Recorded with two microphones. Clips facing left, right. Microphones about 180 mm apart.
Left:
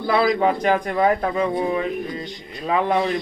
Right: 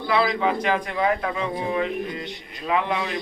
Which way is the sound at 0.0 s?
45° left (ahead or behind).